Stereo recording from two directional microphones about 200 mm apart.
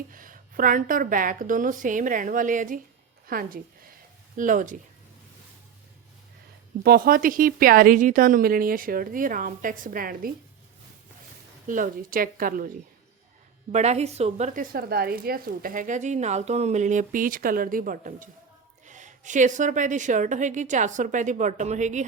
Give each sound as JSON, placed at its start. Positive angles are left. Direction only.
{"t": 0.1, "sound": "speech", "side_deg": -45}
{"t": 6.8, "sound": "a woman's voice", "side_deg": -50}
{"t": 11.7, "sound": "a woman's voice", "side_deg": -45}
{"t": 13.7, "sound": "speech", "side_deg": -35}